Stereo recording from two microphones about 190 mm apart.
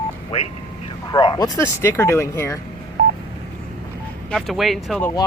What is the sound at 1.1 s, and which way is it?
Speech, 20° left (ahead or behind).